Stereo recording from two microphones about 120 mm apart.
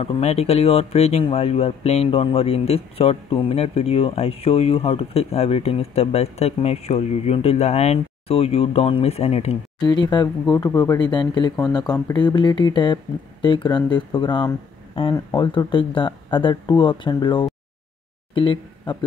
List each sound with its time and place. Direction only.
0.0 s speech: 55° left (ahead or behind)
9.8 s speech: 35° left (ahead or behind)